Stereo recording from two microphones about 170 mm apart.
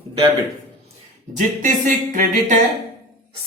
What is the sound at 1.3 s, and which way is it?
Speech, 50° right (ahead or behind).